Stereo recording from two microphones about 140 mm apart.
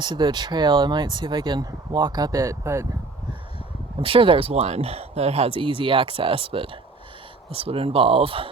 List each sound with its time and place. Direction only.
0.0 s speech: 35° right (ahead or behind)
3.9 s speech: 40° right (ahead or behind)